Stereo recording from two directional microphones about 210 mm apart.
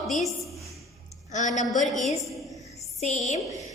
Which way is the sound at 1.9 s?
Centre (ahead or behind).